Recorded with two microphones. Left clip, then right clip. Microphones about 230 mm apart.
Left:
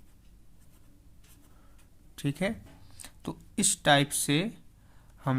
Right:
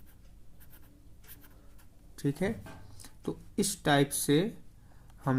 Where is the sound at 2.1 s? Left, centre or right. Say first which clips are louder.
Left 1 dB; left.